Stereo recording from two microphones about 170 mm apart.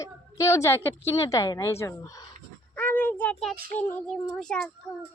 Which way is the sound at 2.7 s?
10° left (ahead or behind).